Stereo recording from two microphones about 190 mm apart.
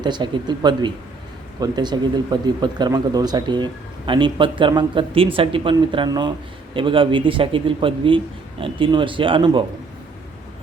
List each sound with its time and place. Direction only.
0.0 s speech: 25° right (ahead or behind)